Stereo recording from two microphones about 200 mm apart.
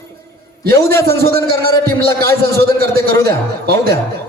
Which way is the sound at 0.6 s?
50° right (ahead or behind).